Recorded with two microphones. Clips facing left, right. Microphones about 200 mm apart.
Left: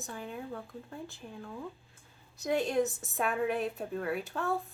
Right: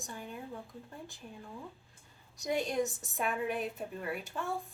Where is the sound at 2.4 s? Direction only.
Centre (ahead or behind).